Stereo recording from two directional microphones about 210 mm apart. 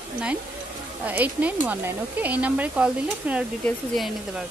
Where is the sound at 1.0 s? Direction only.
5° right (ahead or behind).